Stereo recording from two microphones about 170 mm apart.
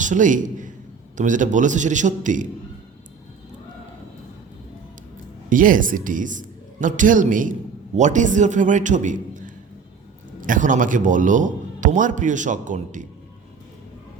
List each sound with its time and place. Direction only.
0.0 s a man's voice: 50° right (ahead or behind)
5.5 s a woman's voice: 50° right (ahead or behind)
10.4 s a man's voice: 50° right (ahead or behind)